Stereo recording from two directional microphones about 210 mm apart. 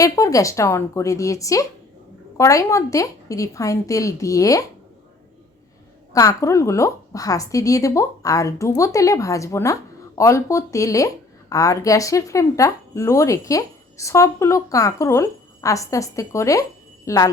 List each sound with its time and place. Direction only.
0.0 s a woman's voice: 15° left (ahead or behind)
6.1 s a woman's voice: 15° left (ahead or behind)